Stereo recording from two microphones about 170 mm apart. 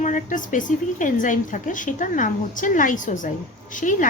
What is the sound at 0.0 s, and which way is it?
A woman's voice, 50° left (ahead or behind).